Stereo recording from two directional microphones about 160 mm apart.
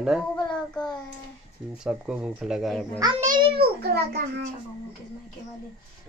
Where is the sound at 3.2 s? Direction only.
60° right (ahead or behind); by 4.2 s 85° right.